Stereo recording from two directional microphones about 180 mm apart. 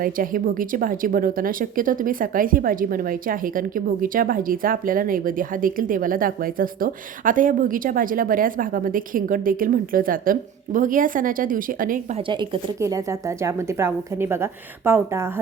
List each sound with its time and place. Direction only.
0.0 s a woman's voice: 50° right (ahead or behind)
12.3 s speech: 25° right (ahead or behind)